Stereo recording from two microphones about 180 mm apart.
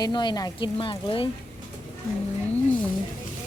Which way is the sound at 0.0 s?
25° left (ahead or behind).